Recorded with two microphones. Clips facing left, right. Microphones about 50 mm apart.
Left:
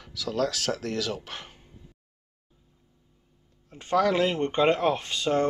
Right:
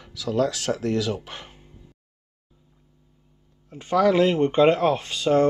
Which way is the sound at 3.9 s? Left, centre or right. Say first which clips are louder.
Right 4 dB; right.